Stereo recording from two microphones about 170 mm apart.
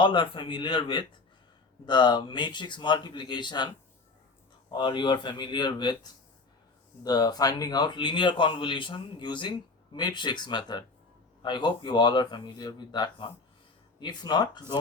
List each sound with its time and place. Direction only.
0.0 s a man's voice: 30° left (ahead or behind)
4.7 s a man's voice: 25° left (ahead or behind)